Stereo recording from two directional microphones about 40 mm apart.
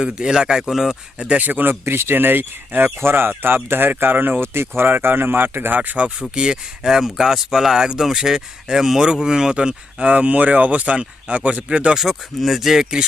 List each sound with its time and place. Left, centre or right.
0.0 s speech: centre
0.6 s speech: centre
1.4 s speech: right
1.8 s speech: right
4.4 s speech: right
5.0 s speech: right
6.3 s speech: centre
11.9 s speech: centre